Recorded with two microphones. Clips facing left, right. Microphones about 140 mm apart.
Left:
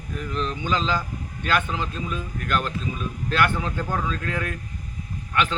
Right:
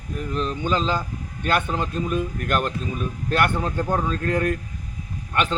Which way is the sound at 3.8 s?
25° right (ahead or behind).